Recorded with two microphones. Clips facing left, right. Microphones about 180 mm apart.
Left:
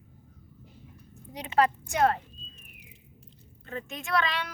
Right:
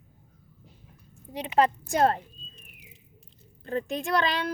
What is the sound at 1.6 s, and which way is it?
Speech, 35° right (ahead or behind).